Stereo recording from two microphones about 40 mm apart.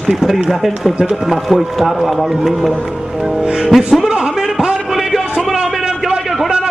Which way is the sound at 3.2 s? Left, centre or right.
Centre.